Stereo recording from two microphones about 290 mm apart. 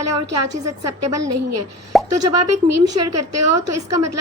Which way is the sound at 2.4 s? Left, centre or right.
Right.